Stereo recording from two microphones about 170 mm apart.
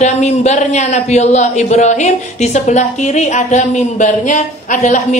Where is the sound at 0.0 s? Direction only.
40° left (ahead or behind).